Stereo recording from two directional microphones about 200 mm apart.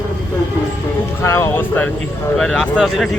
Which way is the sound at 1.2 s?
10° left (ahead or behind).